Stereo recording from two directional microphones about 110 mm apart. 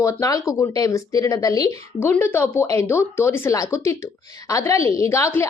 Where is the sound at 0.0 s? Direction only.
30° left (ahead or behind).